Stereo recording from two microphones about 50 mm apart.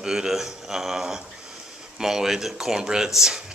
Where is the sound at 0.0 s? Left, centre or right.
Centre.